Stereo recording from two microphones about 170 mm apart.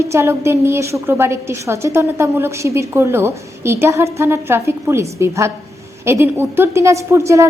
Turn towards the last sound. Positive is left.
turn(degrees=-15)  # may be behind; listen again after turning